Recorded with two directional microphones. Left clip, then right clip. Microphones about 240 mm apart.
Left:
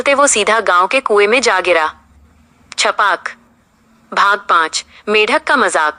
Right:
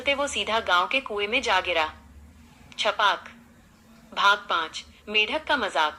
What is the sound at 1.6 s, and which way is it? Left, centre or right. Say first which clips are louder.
Speech: left 12 dB; left.